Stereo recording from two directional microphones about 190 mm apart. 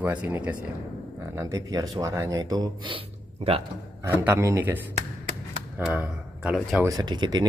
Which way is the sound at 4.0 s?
10° right (ahead or behind).